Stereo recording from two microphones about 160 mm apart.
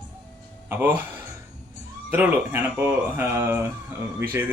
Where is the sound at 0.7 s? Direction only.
10° right (ahead or behind).